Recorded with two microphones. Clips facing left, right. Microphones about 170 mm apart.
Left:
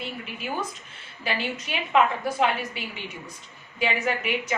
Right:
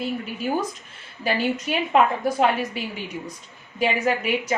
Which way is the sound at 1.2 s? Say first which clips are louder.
Right 6 dB; 40° right (ahead or behind).